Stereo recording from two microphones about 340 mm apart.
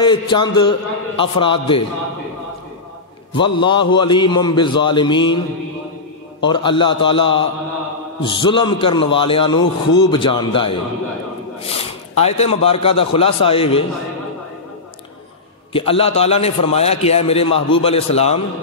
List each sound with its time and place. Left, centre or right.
0.0 s a man's voice: centre
3.3 s a man's voice: centre
6.4 s a man's voice: centre
15.7 s a man's voice: centre